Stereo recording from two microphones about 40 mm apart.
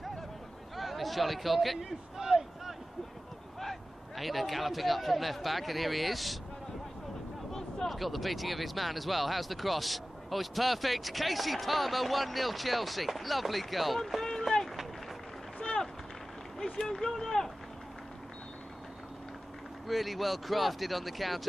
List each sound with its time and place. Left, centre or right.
0.7 s speech: centre
2.1 s a sound: centre
4.2 s speech: centre
7.5 s speech: centre
15.6 s a sound: left
16.5 s speech: centre
19.9 s speech: centre